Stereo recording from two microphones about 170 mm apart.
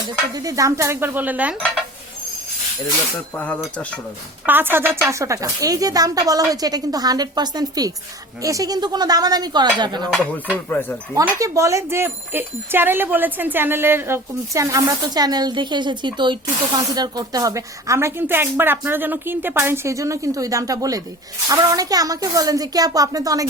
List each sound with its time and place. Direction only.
0.0 s speech: 25° right (ahead or behind)
1.5 s stir: 5° left (ahead or behind)
3.3 s speech: 10° left (ahead or behind)
4.4 s a woman's voice: 10° right (ahead or behind)
10.5 s speech: 10° left (ahead or behind)
11.1 s a woman's voice: 20° right (ahead or behind)